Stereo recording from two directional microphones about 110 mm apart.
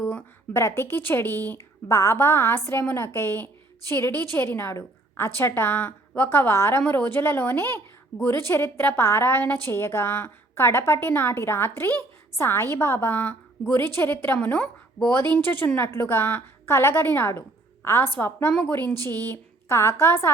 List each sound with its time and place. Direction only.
0.1 s a woman's voice: 20° left (ahead or behind)